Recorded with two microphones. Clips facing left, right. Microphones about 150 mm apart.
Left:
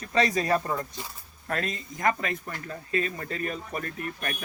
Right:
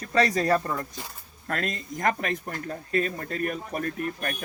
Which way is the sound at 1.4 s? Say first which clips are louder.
Right 1 dB; 55° right (ahead or behind).